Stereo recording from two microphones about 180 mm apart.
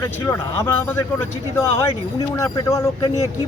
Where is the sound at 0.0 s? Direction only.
15° left (ahead or behind).